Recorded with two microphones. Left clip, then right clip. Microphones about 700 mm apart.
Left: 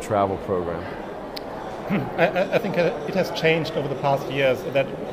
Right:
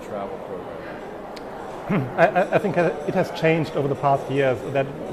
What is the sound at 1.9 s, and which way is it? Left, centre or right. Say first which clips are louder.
Speech: right 3 dB; right.